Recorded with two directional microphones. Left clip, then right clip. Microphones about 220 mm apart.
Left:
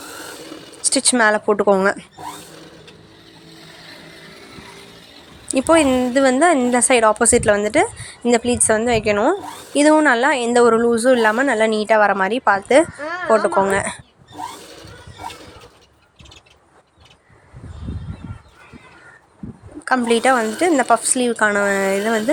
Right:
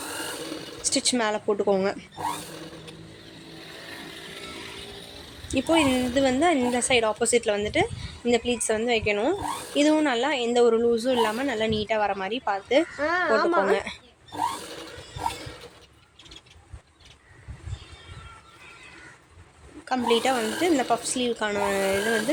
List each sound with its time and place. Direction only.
0.8 s a woman's voice: 15° left (ahead or behind)
5.5 s a woman's voice: 15° left (ahead or behind)
13.0 s a woman's voice: 30° right (ahead or behind)
13.7 s a woman's voice: 20° left (ahead or behind)
19.8 s a woman's voice: 20° left (ahead or behind)